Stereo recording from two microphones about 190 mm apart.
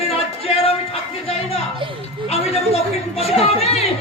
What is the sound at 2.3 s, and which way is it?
A woman's voice, 30° left (ahead or behind).